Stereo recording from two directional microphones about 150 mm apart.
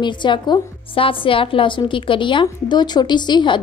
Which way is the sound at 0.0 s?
30° left (ahead or behind).